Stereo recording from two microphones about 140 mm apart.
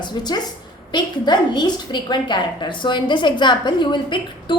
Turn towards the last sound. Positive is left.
turn(degrees=35)  # may be behind; listen again after turning